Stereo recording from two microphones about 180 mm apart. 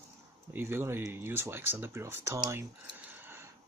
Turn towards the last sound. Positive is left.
turn(degrees=-10)  # may be behind; listen again after turning